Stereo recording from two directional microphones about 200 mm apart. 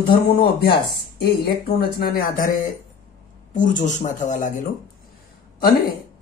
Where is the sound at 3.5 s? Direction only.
40° left (ahead or behind).